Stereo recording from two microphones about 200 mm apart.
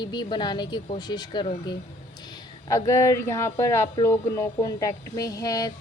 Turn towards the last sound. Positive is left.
turn(degrees=20)  # may be behind; listen again after turning